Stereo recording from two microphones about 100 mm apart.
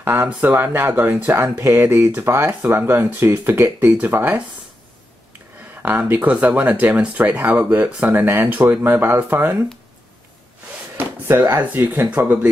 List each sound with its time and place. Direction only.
0.0 s speech: 20° right (ahead or behind)
5.8 s speech: 20° right (ahead or behind)
11.0 s speech: 25° right (ahead or behind)